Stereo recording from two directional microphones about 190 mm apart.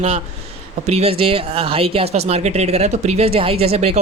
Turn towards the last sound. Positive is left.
turn(degrees=-30)  # may be behind; listen again after turning